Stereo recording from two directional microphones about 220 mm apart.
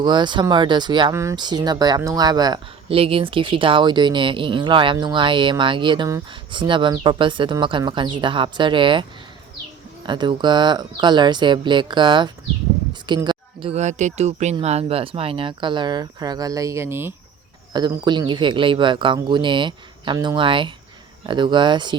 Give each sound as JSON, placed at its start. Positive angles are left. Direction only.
{"t": 0.0, "sound": "speech", "side_deg": -20}
{"t": 10.1, "sound": "speech", "side_deg": -20}